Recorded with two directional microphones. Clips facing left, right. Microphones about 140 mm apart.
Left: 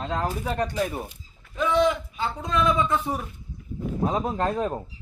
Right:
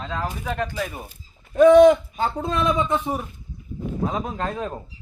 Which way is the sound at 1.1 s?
50° right (ahead or behind).